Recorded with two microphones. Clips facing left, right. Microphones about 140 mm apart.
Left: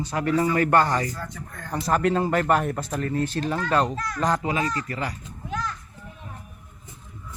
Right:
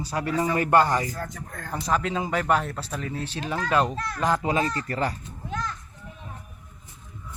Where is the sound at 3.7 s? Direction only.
5° right (ahead or behind).